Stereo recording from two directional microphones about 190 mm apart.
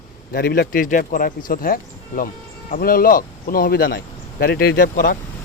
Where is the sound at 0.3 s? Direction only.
55° left (ahead or behind).